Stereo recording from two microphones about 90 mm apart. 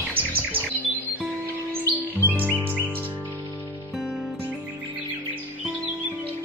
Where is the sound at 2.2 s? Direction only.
20° right (ahead or behind).